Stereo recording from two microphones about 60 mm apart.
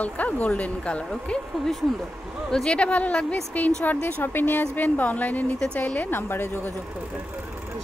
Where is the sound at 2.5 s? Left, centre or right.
Centre; by 6.7 s left.